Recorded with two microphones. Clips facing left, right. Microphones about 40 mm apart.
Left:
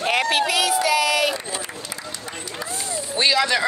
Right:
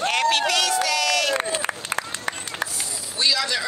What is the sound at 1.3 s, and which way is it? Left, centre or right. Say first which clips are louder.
Run: right 4 dB; right.